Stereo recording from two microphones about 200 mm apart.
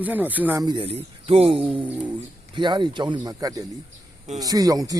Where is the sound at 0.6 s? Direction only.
20° right (ahead or behind).